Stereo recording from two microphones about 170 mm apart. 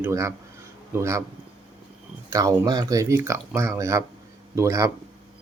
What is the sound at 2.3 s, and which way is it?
Speech, 20° right (ahead or behind).